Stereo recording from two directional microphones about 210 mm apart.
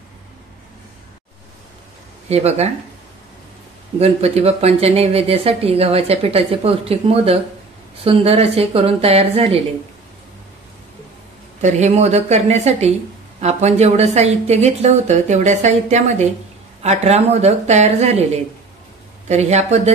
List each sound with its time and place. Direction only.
2.2 s speech: 30° right (ahead or behind)
4.0 s a woman's voice: 30° right (ahead or behind)
11.6 s speech: 30° right (ahead or behind)